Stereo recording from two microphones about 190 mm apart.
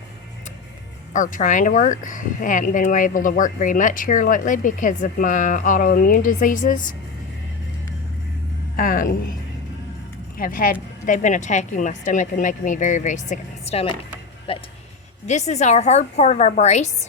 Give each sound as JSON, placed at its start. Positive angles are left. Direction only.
{"t": 1.1, "sound": "speech", "side_deg": 40}
{"t": 8.7, "sound": "a woman's voice", "side_deg": 45}
{"t": 10.3, "sound": "speech", "side_deg": 50}